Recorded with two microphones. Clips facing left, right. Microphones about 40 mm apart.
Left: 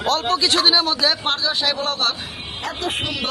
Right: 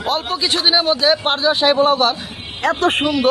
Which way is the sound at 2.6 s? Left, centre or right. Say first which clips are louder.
Right 9 dB; right.